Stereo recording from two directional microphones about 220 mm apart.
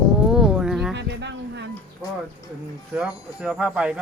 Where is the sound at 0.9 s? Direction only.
50° right (ahead or behind).